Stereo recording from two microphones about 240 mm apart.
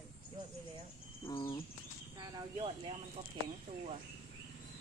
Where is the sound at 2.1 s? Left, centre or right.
Centre.